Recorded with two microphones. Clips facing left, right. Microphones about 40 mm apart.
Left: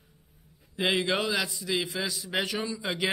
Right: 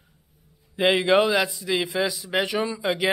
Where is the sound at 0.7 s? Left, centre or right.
Centre.